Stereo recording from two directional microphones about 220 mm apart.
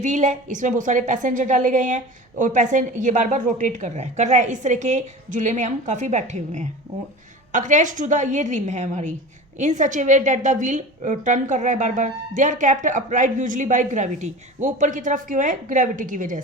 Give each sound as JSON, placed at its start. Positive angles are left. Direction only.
{"t": 0.0, "sound": "a woman's voice", "side_deg": -35}